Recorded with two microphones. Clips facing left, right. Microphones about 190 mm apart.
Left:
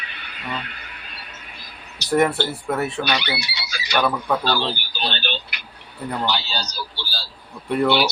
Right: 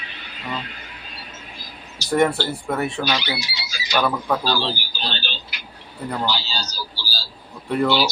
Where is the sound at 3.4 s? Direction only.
65° left (ahead or behind).